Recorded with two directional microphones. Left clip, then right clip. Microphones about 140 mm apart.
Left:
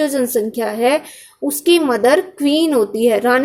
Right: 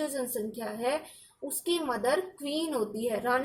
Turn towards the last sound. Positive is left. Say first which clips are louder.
# left 15 dB
turn(degrees=35)  # may be behind; listen again after turning